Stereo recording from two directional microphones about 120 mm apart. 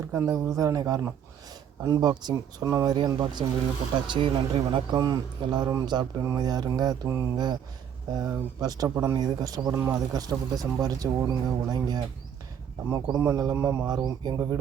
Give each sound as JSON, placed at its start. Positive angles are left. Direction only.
{"t": 0.1, "sound": "speech", "side_deg": -20}
{"t": 13.8, "sound": "speech", "side_deg": -35}